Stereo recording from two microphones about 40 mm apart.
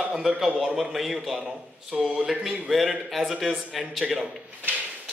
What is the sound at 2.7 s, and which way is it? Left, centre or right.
Speech, right.